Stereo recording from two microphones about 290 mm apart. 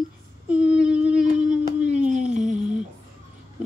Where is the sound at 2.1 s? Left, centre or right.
Right.